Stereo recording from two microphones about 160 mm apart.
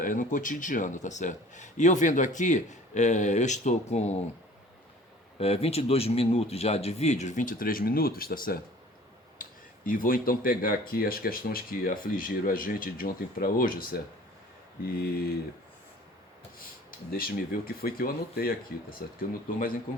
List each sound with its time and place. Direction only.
0.0 s speech: 55° left (ahead or behind)
5.4 s speech: 40° left (ahead or behind); by 13.8 s 65° left (ahead or behind)
14.8 s speech: 70° left (ahead or behind)
17.1 s speech: 65° left (ahead or behind)